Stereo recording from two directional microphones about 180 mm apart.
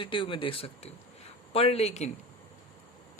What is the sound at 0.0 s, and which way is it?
Speech, 30° left (ahead or behind).